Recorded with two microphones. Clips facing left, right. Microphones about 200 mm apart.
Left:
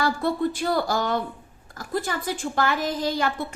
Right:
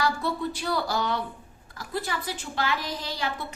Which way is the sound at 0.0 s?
50° left (ahead or behind).